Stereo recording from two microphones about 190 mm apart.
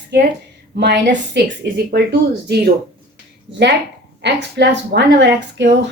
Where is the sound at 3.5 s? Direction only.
70° right (ahead or behind).